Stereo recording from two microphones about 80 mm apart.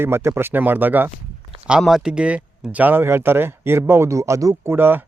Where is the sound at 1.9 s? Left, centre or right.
Centre; by 4.5 s right.